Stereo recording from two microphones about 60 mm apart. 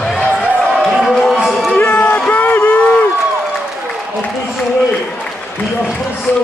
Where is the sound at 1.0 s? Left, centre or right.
Centre.